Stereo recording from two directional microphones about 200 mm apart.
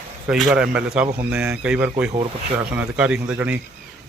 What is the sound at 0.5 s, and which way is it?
Speech, 5° right (ahead or behind).